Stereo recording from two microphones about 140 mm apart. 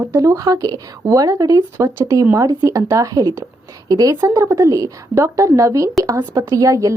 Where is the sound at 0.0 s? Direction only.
25° right (ahead or behind).